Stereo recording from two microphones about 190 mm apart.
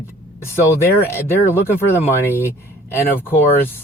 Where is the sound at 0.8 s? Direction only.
10° left (ahead or behind).